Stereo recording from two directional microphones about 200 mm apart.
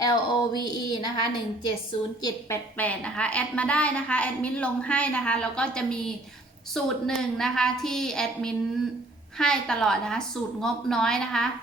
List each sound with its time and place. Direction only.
0.0 s a woman's voice: 20° left (ahead or behind); by 11.4 s 5° left (ahead or behind)